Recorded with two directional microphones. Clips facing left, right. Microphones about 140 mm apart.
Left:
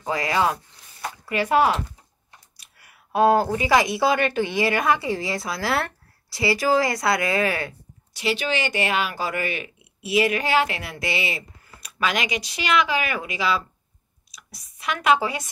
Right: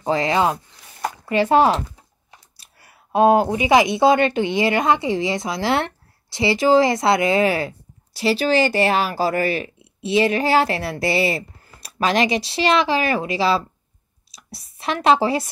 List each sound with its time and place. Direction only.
0.0 s speech: 25° right (ahead or behind)